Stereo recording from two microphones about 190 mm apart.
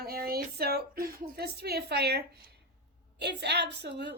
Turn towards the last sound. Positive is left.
turn(degrees=-65)  # may be behind; listen again after turning